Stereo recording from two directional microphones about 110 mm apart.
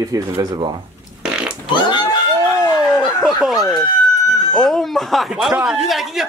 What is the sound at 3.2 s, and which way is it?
Chicken, 5° right (ahead or behind).